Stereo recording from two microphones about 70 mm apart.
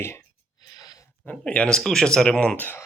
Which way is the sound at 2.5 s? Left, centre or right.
Left.